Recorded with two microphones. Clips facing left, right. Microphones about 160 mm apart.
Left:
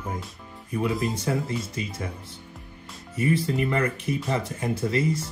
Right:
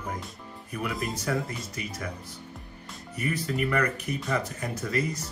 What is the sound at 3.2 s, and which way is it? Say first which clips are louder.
Speech: left 5 dB; 25° left (ahead or behind).